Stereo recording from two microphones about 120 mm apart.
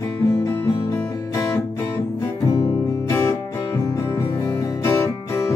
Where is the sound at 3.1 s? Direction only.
25° left (ahead or behind).